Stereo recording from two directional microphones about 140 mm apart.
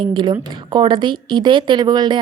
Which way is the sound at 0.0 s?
35° right (ahead or behind).